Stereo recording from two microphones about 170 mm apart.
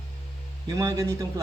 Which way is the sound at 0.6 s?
20° right (ahead or behind).